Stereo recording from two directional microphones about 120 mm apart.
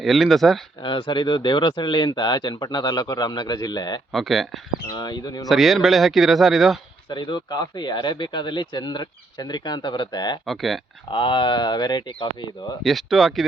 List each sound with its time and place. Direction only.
0.0 s speech: centre (ahead or behind)
0.8 s speech: 45° left (ahead or behind)
4.1 s speech: centre (ahead or behind)
4.9 s speech: 35° left (ahead or behind)
5.5 s speech: centre (ahead or behind)
7.1 s speech: 40° left (ahead or behind)
10.4 s speech: centre (ahead or behind)
11.1 s speech: 40° left (ahead or behind)
12.8 s speech: centre (ahead or behind)